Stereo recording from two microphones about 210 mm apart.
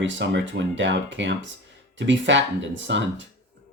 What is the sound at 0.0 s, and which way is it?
Speech, 60° right (ahead or behind).